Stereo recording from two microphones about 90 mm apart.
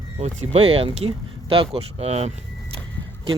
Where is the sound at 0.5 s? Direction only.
90° right.